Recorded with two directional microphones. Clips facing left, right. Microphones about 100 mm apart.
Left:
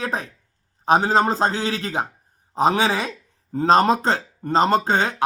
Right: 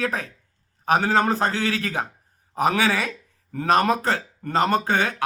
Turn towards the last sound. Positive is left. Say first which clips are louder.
# left 2 dB
turn(degrees=25)  # may be behind; listen again after turning